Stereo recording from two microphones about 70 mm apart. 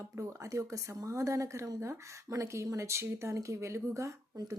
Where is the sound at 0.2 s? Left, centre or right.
Right.